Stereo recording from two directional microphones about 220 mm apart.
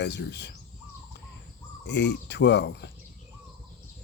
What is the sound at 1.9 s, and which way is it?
Speech, 50° left (ahead or behind).